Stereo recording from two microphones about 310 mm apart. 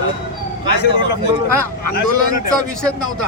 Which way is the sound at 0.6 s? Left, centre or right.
Centre.